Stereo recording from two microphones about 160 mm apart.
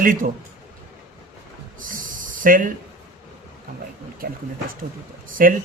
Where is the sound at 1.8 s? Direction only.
55° right (ahead or behind).